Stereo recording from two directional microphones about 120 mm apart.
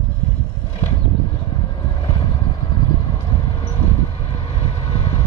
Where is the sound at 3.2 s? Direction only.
35° left (ahead or behind).